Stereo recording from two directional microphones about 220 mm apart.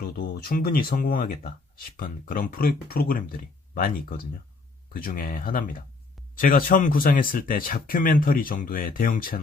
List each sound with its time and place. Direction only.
0.0 s speech: 40° left (ahead or behind)